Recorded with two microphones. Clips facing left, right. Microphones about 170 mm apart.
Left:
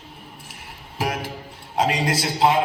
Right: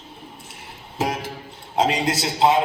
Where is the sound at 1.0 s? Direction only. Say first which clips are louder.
Right 1 dB; 25° right (ahead or behind).